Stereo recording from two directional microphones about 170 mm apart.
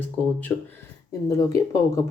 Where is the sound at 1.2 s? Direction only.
20° left (ahead or behind).